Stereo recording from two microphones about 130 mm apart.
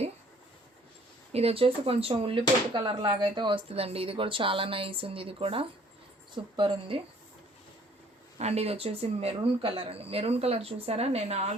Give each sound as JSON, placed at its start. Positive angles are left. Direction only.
{"t": 1.3, "sound": "speech", "side_deg": -50}
{"t": 2.7, "sound": "speech", "side_deg": -35}
{"t": 8.4, "sound": "speech", "side_deg": -55}